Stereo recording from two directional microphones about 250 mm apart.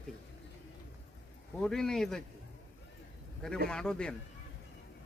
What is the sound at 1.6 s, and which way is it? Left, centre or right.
Speech, centre.